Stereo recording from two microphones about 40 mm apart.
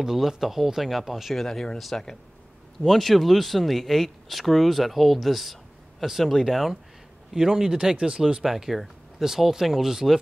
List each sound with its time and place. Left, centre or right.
0.0 s speech: centre
1.3 s speech: centre
2.8 s speech: centre
7.3 s speech: centre
8.5 s speech: centre